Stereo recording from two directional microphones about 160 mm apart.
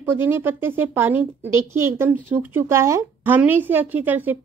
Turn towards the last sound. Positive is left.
turn(degrees=-10)  # may be behind; listen again after turning